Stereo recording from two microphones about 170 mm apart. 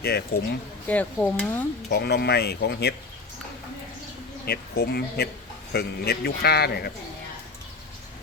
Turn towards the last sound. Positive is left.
turn(degrees=70)  # may be behind; listen again after turning